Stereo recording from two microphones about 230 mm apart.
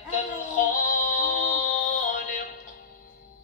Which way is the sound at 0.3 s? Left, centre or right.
Left.